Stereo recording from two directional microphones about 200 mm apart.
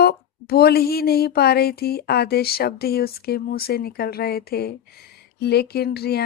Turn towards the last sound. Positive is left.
turn(degrees=50)  # may be behind; listen again after turning